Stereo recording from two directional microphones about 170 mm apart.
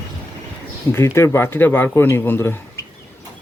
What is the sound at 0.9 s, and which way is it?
Speech, 15° left (ahead or behind).